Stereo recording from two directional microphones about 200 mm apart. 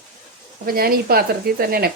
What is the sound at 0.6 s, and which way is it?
Speech, 45° right (ahead or behind).